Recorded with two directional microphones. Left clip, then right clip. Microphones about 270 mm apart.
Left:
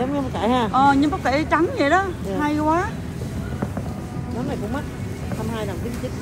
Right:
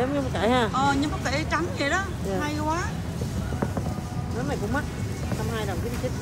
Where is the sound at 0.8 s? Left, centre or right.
Centre.